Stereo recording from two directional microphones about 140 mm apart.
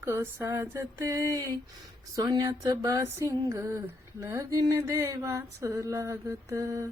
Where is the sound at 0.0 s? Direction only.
15° right (ahead or behind).